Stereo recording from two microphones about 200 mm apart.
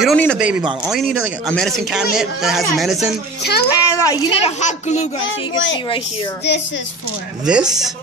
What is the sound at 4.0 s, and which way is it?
Speech, 15° left (ahead or behind).